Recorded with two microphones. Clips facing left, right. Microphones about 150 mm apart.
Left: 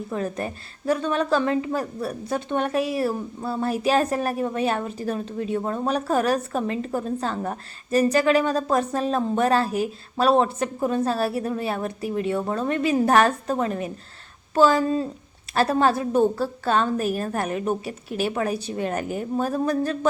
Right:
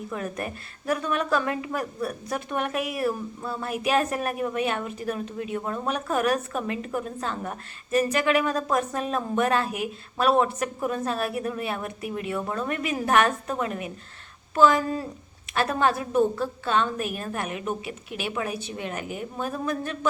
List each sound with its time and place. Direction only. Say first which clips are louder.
0.1 s a woman's voice: left 4 dB; 30° left (ahead or behind)